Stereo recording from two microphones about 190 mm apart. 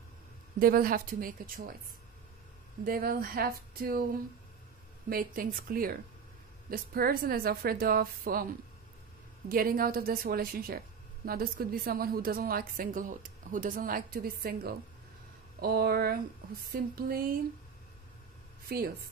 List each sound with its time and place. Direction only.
0.6 s a woman's voice: 50° right (ahead or behind)
2.8 s a woman's voice: 50° right (ahead or behind)
9.5 s a woman's voice: 50° right (ahead or behind)
18.7 s speech: 55° right (ahead or behind)